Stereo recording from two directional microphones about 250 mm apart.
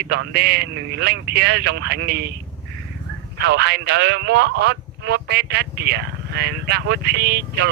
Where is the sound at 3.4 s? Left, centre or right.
Right.